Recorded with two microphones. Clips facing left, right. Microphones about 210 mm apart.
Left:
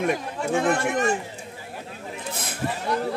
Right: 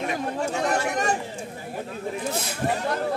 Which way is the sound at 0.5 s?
50° left (ahead or behind).